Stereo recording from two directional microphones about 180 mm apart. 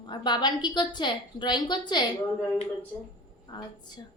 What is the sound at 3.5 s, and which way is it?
Speech, 25° left (ahead or behind).